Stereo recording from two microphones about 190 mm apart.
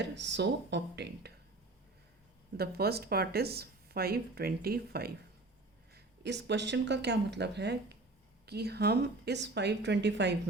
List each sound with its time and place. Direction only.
0.0 s speech: 65° right (ahead or behind)
2.6 s speech: 55° right (ahead or behind)